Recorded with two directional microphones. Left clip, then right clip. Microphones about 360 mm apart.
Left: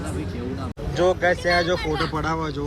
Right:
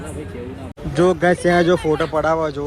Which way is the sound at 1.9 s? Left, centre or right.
Centre.